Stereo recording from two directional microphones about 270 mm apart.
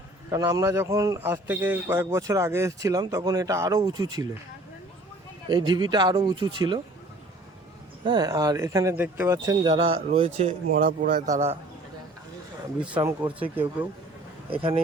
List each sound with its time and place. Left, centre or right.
0.3 s a man's voice: centre
5.5 s a man's voice: centre
8.0 s a man's voice: centre
13.0 s a man's voice: centre
14.5 s speech: centre